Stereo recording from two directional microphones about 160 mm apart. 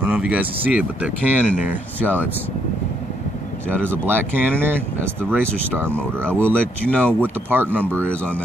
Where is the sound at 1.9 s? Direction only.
10° left (ahead or behind).